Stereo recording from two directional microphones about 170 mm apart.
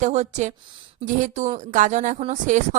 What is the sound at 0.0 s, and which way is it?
A woman's voice, 45° right (ahead or behind).